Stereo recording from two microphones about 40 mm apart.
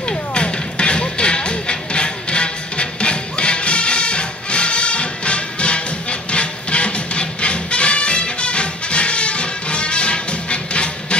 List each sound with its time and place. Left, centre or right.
0.1 s music: left